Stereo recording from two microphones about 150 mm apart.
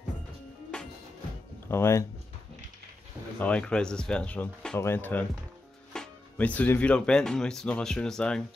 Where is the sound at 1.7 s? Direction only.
15° left (ahead or behind).